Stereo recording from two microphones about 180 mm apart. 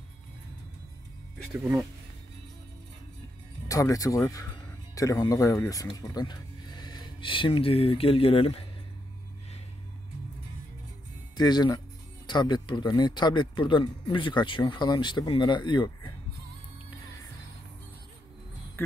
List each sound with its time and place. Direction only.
1.5 s speech: 5° right (ahead or behind)
3.6 s speech: 20° left (ahead or behind)
11.3 s speech: 25° left (ahead or behind)